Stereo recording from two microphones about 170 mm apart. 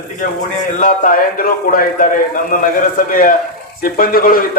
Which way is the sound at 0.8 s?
50° left (ahead or behind).